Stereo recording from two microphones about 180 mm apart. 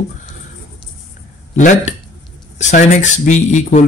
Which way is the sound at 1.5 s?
40° left (ahead or behind).